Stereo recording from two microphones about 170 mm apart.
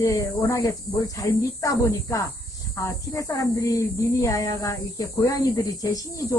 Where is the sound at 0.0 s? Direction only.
20° left (ahead or behind).